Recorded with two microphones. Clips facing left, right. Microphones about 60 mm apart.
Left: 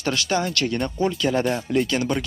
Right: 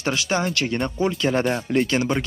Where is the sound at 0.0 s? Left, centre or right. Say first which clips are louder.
Even; centre.